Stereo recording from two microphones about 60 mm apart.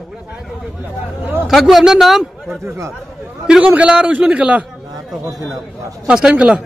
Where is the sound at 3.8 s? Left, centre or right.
Centre.